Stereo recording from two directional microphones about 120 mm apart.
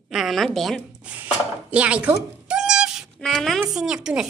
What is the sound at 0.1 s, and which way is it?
Speech, centre (ahead or behind).